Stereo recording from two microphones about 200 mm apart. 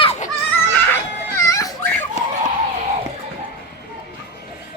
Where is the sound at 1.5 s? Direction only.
15° left (ahead or behind).